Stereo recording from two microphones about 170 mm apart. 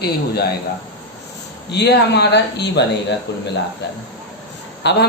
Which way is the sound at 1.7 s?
80° left.